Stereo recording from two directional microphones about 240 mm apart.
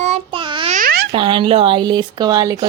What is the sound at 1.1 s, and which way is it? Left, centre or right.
A woman's voice, right.